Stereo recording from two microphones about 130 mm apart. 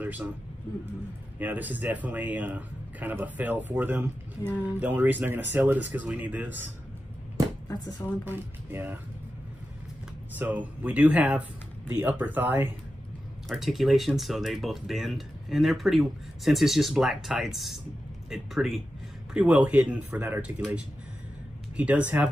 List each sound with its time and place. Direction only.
0.0 s speech: 10° right (ahead or behind)
1.4 s a man's voice: 15° right (ahead or behind)
8.3 s a man's voice: 15° right (ahead or behind)
10.3 s a man's voice: 15° right (ahead or behind)
13.5 s a man's voice: centre (ahead or behind)